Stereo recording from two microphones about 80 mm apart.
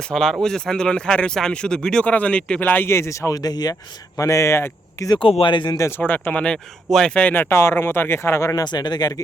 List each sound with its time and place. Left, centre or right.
0.0 s speech: centre
2.9 s speech: left
4.2 s speech: left
5.0 s speech: left
5.7 s speech: left
6.0 s speech: left
7.5 s speech: left
8.6 s speech: left